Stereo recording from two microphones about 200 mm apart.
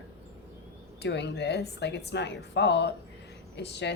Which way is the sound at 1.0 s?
55° left (ahead or behind).